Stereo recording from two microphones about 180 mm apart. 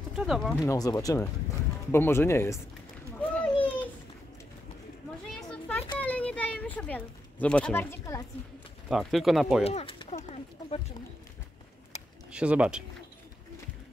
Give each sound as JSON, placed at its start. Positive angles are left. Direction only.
{"t": 0.1, "sound": "speech", "side_deg": -5}
{"t": 0.7, "sound": "speech", "side_deg": 20}
{"t": 3.2, "sound": "a sound", "side_deg": 5}
{"t": 5.5, "sound": "a sound", "side_deg": 5}
{"t": 8.8, "sound": "speech", "side_deg": 0}
{"t": 9.7, "sound": "speech", "side_deg": 30}
{"t": 12.3, "sound": "speech", "side_deg": -5}